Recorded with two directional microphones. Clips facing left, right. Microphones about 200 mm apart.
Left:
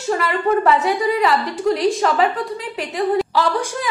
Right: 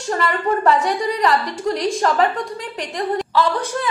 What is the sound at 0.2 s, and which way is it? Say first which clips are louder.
A woman's voice: right 1 dB; centre (ahead or behind).